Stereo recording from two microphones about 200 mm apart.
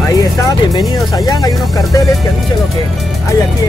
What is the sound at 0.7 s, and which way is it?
Speech, 20° left (ahead or behind).